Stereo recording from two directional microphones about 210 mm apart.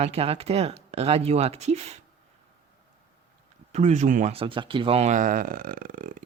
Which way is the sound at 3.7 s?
35° right (ahead or behind).